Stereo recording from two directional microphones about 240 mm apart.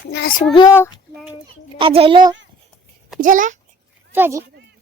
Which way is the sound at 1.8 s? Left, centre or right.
Right.